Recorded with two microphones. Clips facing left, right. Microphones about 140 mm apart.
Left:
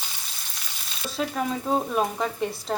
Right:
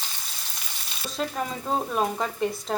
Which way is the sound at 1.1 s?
Centre (ahead or behind).